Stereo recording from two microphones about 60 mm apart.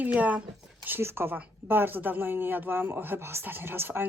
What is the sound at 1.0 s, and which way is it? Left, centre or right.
Speech, right.